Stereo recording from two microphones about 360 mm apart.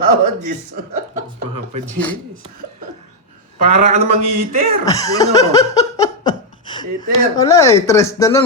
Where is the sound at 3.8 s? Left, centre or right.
Centre.